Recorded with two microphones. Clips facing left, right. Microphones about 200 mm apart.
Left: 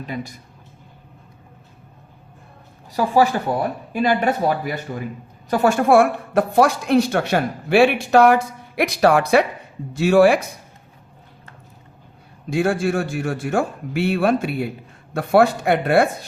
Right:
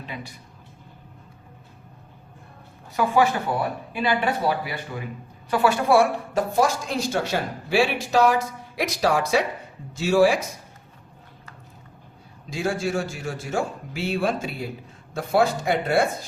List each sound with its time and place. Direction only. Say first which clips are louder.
0.0 s speech: left 7 dB; 45° left (ahead or behind)
2.9 s a woman's voice: left 3 dB; 35° left (ahead or behind); by 10.5 s 60° left (ahead or behind)
12.5 s a woman's voice: left 6 dB; 55° left (ahead or behind)